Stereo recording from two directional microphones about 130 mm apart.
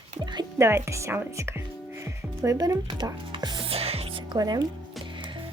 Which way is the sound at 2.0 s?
25° right (ahead or behind).